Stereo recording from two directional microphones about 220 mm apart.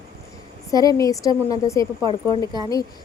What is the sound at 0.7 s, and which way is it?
Speech, 15° left (ahead or behind).